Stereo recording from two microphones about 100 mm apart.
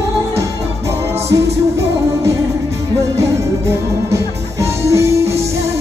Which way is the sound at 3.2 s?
30° right (ahead or behind).